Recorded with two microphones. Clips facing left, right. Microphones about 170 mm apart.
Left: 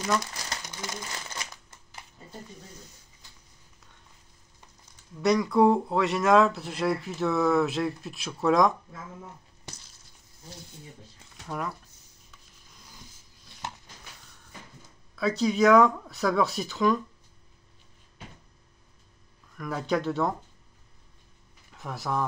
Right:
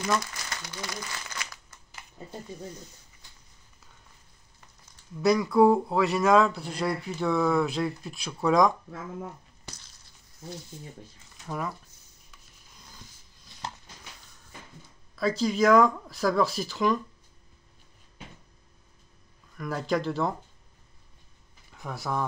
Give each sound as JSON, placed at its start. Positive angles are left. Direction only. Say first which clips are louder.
{"t": 0.7, "sound": "crumpling", "louder": "even", "side_deg": 20}
{"t": 5.1, "sound": "speech", "louder": "right 1 dB", "side_deg": 0}
{"t": 11.4, "sound": "speech", "louder": "even", "side_deg": 0}
{"t": 15.1, "sound": "speech", "louder": "left 1 dB", "side_deg": 0}
{"t": 19.5, "sound": "speech", "louder": "even", "side_deg": 0}
{"t": 21.7, "sound": "speech", "louder": "left 1 dB", "side_deg": 0}